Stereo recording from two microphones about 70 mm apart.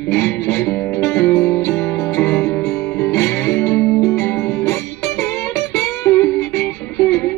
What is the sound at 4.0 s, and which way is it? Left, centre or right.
Music, left.